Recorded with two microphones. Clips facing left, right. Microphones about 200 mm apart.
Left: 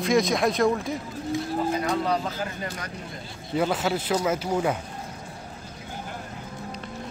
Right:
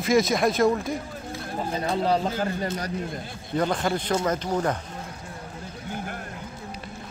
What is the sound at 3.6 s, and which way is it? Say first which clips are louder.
Speech: even; 5° left (ahead or behind).